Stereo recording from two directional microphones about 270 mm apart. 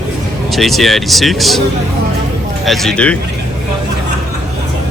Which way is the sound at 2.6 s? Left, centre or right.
Centre.